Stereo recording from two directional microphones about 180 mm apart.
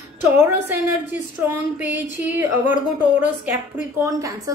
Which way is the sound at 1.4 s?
10° right (ahead or behind).